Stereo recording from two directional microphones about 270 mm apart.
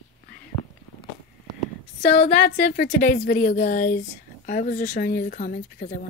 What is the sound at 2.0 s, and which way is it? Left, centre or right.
A woman's voice, left.